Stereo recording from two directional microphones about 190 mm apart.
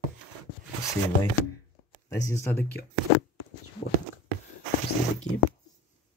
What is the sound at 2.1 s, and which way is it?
Speech, 15° left (ahead or behind).